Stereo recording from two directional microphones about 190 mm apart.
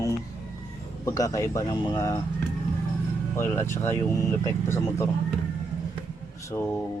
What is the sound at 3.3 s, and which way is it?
Speech, 15° left (ahead or behind).